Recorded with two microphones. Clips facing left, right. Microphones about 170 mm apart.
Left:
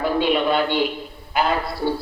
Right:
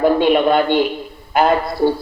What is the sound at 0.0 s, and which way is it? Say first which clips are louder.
A man's voice: right 6 dB; 50° right (ahead or behind).